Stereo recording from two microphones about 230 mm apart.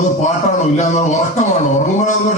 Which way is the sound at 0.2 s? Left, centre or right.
Left.